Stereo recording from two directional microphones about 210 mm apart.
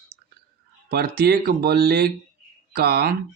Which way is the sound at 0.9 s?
45° right (ahead or behind).